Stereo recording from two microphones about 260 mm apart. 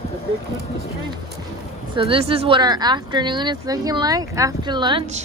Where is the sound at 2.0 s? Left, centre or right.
Right.